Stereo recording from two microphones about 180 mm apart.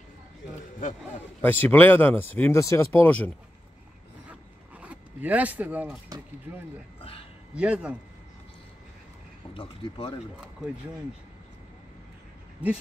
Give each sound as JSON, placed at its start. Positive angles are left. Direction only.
{"t": 1.4, "sound": "speech", "side_deg": 10}
{"t": 4.3, "sound": "zipper", "side_deg": -5}
{"t": 6.5, "sound": "speech", "side_deg": -10}
{"t": 7.0, "sound": "a sound", "side_deg": 30}
{"t": 7.5, "sound": "speech", "side_deg": -5}
{"t": 9.5, "sound": "speech", "side_deg": 30}